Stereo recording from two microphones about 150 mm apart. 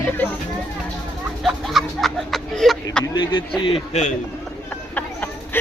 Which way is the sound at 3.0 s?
30° left (ahead or behind).